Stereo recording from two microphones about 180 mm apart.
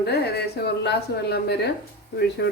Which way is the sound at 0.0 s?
65° left (ahead or behind).